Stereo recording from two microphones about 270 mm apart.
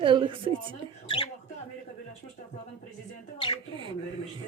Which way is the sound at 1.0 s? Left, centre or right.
Centre.